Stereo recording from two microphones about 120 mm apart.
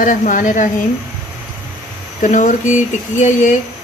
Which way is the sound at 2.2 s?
90° left.